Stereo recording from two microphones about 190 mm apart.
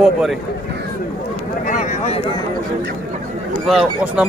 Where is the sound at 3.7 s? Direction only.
Centre (ahead or behind).